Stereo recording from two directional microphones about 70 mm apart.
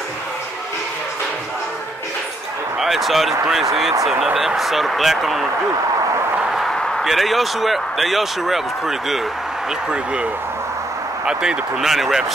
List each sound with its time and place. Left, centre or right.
2.8 s speech: centre
6.7 s speech: centre
11.2 s speech: centre